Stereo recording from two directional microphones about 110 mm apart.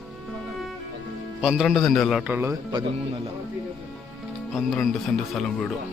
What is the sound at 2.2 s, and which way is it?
Speech, 20° right (ahead or behind).